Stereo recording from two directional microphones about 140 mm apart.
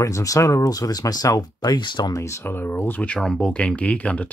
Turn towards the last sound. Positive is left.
turn(degrees=10)  # may be behind; listen again after turning